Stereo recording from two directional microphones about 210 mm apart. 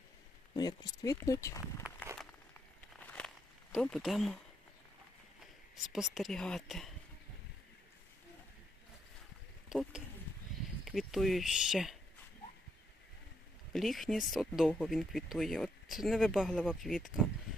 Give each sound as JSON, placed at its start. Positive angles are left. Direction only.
{"t": 0.5, "sound": "speech", "side_deg": 20}
{"t": 3.1, "sound": "walk", "side_deg": 5}
{"t": 5.7, "sound": "speech", "side_deg": 0}
{"t": 9.6, "sound": "speech", "side_deg": -5}
{"t": 13.7, "sound": "speech", "side_deg": 0}